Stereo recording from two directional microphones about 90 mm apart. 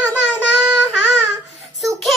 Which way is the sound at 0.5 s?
10° right (ahead or behind).